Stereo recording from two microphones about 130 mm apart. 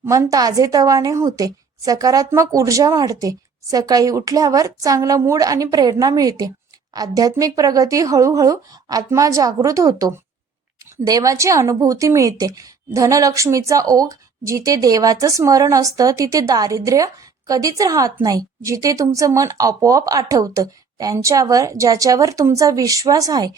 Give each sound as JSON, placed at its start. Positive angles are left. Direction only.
{"t": 0.0, "sound": "a woman's voice", "side_deg": -20}